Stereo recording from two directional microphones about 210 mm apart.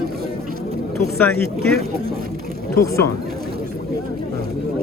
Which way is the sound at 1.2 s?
10° left (ahead or behind).